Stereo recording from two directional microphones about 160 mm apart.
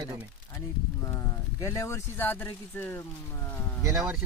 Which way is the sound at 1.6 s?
20° left (ahead or behind).